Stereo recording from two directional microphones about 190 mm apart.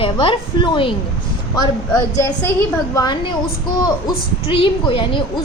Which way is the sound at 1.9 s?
10° left (ahead or behind).